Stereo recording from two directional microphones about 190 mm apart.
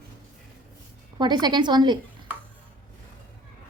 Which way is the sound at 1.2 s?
25° right (ahead or behind).